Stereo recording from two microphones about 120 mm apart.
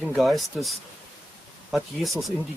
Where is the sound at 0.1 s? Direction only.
Centre (ahead or behind).